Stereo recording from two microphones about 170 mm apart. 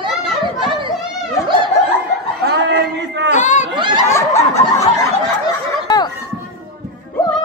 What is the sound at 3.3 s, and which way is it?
Chatter, 45° left (ahead or behind).